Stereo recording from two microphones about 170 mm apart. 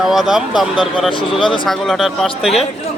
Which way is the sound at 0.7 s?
30° left (ahead or behind).